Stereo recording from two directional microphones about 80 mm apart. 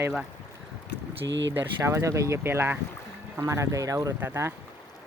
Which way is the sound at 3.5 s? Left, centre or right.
Right.